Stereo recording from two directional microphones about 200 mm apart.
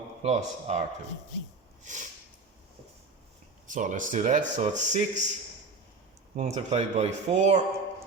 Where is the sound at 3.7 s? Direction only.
40° right (ahead or behind).